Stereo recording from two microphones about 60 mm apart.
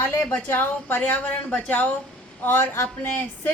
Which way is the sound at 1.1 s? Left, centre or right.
Left.